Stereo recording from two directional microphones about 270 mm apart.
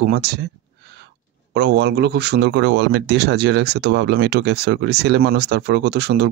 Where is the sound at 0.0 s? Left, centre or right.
Right.